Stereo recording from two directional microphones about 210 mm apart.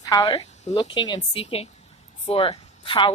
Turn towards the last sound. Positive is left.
turn(degrees=25)  # may be behind; listen again after turning